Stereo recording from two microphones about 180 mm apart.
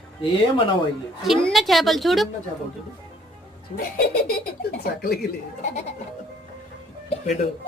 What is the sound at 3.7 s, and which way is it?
Speech, 55° left (ahead or behind).